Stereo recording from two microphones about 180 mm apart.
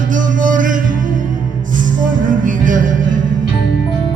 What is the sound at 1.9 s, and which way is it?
Music, 45° right (ahead or behind).